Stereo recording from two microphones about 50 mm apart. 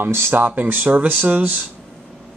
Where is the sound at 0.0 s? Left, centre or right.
Right.